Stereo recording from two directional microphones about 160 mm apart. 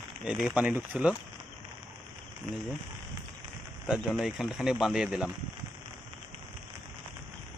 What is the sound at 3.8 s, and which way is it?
Speech, 5° right (ahead or behind).